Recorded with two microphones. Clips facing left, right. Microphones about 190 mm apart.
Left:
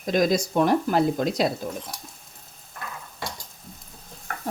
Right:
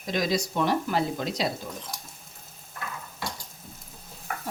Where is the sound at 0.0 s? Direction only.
50° left (ahead or behind).